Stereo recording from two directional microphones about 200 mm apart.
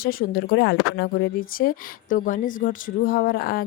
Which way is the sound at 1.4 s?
45° left (ahead or behind).